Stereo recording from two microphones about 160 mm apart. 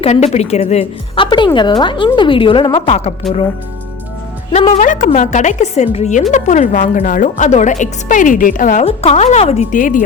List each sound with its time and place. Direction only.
0.0 s a woman's voice: 40° left (ahead or behind)
4.8 s a woman's voice: 55° left (ahead or behind)
8.8 s a woman's voice: 40° left (ahead or behind)
9.7 s speech: 55° left (ahead or behind)